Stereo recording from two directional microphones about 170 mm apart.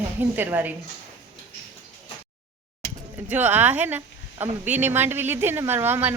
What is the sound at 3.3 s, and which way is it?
Speech, 10° right (ahead or behind).